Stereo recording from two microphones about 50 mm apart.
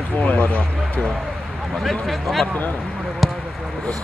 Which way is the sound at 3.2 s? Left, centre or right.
Centre.